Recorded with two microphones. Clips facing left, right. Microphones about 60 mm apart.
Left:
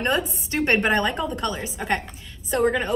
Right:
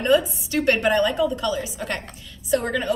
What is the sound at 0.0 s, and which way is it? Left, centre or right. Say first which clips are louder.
A woman's voice: right 5 dB; left.